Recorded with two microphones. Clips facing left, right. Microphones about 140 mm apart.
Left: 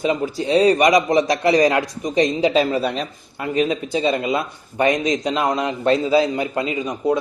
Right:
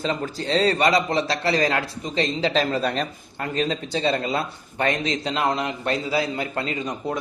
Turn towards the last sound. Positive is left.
turn(degrees=10)  # may be behind; listen again after turning